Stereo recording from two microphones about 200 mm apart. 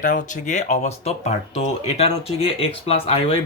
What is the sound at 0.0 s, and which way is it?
Speech, 40° left (ahead or behind).